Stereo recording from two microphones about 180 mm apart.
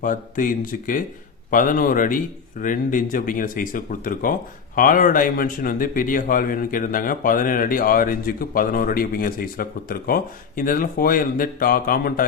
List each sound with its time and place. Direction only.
0.0 s a man's voice: 50° left (ahead or behind)